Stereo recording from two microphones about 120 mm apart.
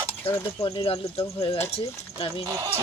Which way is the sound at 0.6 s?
50° left (ahead or behind).